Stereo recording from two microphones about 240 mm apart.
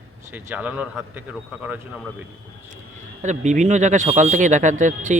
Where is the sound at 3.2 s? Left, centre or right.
Right.